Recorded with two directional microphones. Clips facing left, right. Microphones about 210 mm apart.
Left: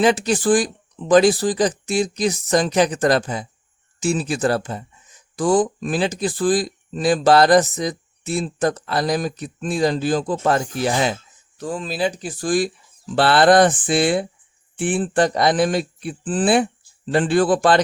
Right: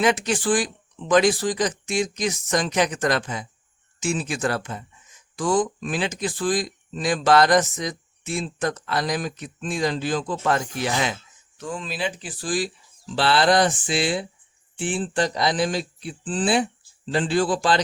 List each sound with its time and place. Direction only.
0.0 s speech: 35° left (ahead or behind); by 17.7 s 55° left (ahead or behind)